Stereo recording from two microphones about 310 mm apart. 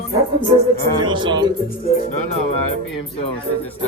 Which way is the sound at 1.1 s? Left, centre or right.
Centre.